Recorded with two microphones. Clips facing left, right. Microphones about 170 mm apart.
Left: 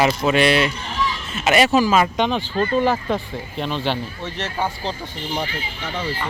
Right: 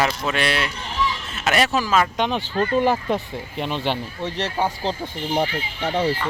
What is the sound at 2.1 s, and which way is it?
Speech, 10° right (ahead or behind).